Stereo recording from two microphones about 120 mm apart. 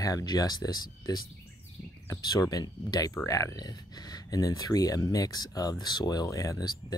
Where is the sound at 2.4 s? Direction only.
30° left (ahead or behind).